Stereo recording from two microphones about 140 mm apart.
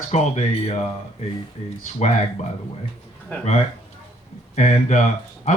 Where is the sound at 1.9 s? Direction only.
55° left (ahead or behind).